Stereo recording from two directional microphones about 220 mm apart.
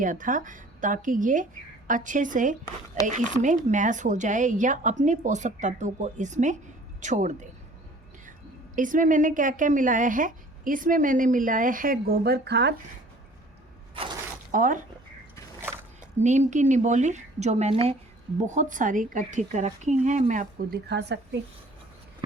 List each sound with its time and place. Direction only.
0.0 s a woman's voice: 35° right (ahead or behind)
8.7 s a woman's voice: 35° right (ahead or behind)
14.5 s a woman's voice: 35° right (ahead or behind)
16.2 s a woman's voice: 30° right (ahead or behind)
20.8 s speech: 50° right (ahead or behind)